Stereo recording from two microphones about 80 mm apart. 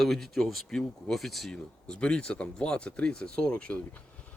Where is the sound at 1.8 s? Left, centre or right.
Centre.